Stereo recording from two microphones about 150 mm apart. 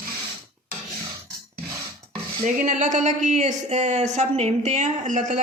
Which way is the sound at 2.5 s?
55° right (ahead or behind).